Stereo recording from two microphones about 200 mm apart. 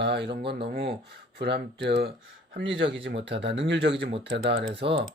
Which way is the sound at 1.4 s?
55° right (ahead or behind).